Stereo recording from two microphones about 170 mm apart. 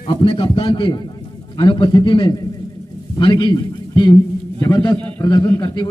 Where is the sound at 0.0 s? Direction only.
30° left (ahead or behind).